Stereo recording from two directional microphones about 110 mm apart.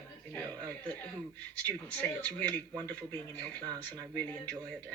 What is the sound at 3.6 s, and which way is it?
Speech, 35° right (ahead or behind).